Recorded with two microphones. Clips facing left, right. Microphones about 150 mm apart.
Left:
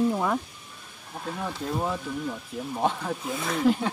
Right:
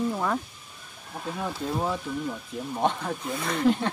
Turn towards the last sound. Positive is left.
turn(degrees=0)  # may be behind; listen again after turning